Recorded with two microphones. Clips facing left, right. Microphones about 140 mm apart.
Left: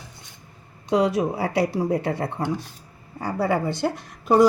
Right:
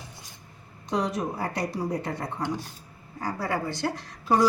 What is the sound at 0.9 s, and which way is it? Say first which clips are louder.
Speech: left 7 dB; 75° left (ahead or behind).